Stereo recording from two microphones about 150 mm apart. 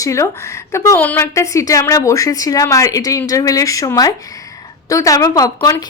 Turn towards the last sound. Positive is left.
turn(degrees=25)  # may be behind; listen again after turning